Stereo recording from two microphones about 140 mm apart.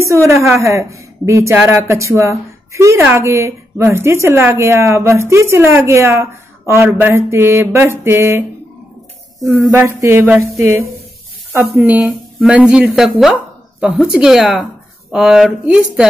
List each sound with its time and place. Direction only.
0.0 s a woman's voice: 20° right (ahead or behind)
6.7 s mantra: 20° right (ahead or behind)
9.4 s a woman's voice: 20° right (ahead or behind)
11.5 s mantra: 15° right (ahead or behind)
12.4 s speech: 10° right (ahead or behind)